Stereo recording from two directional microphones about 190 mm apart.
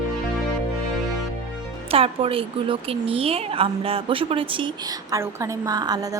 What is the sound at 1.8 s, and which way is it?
A woman's voice, 30° right (ahead or behind).